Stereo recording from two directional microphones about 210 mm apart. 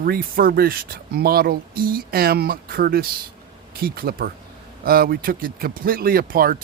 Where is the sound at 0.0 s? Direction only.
45° right (ahead or behind).